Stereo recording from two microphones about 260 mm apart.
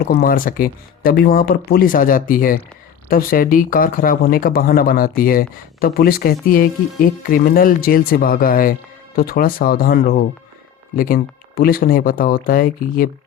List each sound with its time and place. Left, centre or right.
0.1 s speech: left